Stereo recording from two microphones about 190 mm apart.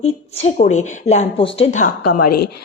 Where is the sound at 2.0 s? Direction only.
50° left (ahead or behind).